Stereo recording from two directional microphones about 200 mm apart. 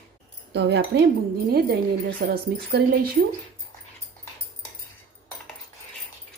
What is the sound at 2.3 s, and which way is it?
Speech, 50° right (ahead or behind).